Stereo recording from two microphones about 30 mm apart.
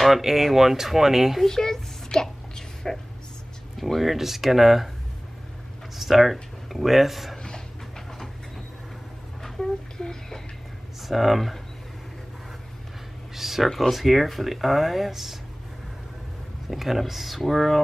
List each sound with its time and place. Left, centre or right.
0.1 s speech: centre
1.4 s a child's voice: centre
2.5 s a sound: centre
3.7 s speech: centre
5.9 s speech: centre
9.4 s a sound: centre
11.1 s speech: centre
13.4 s a sound: centre
13.7 s speech: centre
16.6 s speech: centre